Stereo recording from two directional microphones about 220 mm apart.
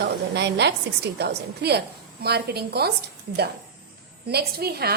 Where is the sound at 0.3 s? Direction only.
50° right (ahead or behind).